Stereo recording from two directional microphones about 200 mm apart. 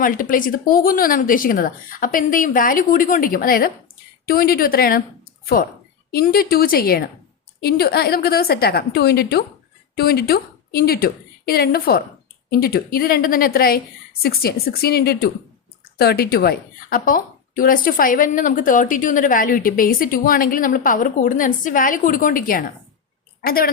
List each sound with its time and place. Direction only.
0.0 s a woman's voice: 45° left (ahead or behind)
6.1 s a woman's voice: 50° left (ahead or behind)